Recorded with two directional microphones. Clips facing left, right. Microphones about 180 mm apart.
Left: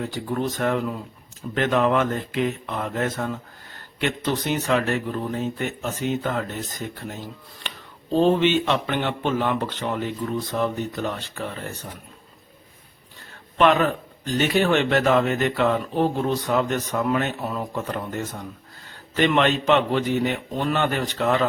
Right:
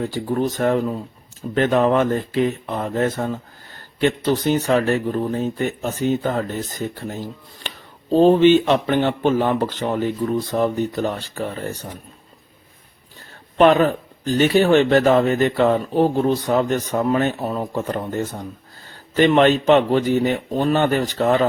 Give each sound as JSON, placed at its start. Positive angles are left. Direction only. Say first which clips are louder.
{"t": 0.0, "sound": "a man's voice", "louder": "right 5 dB", "side_deg": -35}
{"t": 8.1, "sound": "a man's voice", "louder": "right 6 dB", "side_deg": -35}
{"t": 13.6, "sound": "a man's voice", "louder": "right 5 dB", "side_deg": -35}